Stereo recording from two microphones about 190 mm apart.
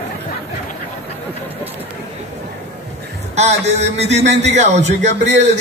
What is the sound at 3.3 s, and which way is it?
A man's voice, 35° right (ahead or behind).